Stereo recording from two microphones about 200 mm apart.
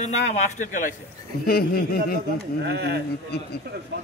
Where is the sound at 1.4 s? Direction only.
50° left (ahead or behind).